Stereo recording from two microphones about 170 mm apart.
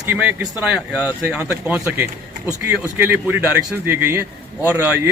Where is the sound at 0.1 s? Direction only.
10° right (ahead or behind).